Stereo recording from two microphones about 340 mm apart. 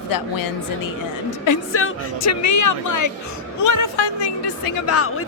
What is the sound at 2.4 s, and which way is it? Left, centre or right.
Speech, left.